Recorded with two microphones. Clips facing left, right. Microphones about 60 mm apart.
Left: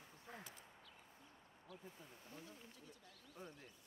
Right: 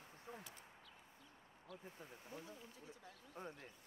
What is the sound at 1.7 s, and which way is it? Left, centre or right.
Speech, centre.